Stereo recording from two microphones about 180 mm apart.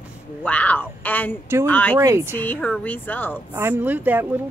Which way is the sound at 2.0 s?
15° right (ahead or behind).